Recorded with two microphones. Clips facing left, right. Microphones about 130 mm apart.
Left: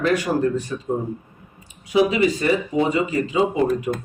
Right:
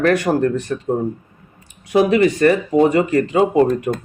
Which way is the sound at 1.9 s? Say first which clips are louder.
Right 4 dB; 60° right (ahead or behind).